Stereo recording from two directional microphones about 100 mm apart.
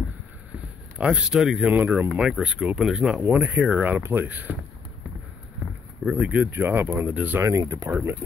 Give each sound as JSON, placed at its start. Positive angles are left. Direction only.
{"t": 0.9, "sound": "speech", "side_deg": -10}
{"t": 1.7, "sound": "speech", "side_deg": -15}
{"t": 6.0, "sound": "speech", "side_deg": -10}
{"t": 7.4, "sound": "speech", "side_deg": -35}
{"t": 7.9, "sound": "speech", "side_deg": -20}